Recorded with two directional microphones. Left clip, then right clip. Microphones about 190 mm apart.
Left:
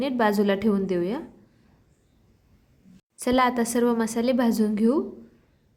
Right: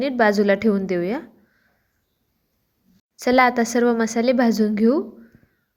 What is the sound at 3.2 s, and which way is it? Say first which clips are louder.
A woman's voice: right 6 dB; 20° right (ahead or behind).